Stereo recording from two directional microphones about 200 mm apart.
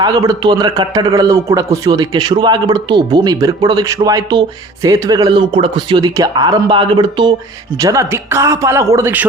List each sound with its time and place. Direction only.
0.0 s a man's voice: 20° right (ahead or behind)